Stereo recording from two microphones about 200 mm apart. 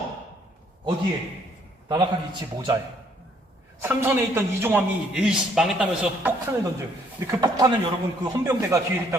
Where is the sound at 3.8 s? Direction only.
10° right (ahead or behind).